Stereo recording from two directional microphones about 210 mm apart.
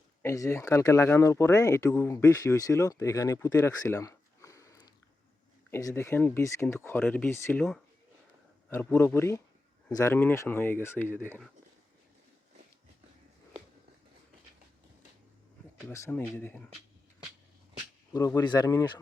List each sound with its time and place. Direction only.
0.2 s speech: 15° left (ahead or behind)
15.9 s speech: 10° left (ahead or behind)
18.3 s speech: 20° left (ahead or behind)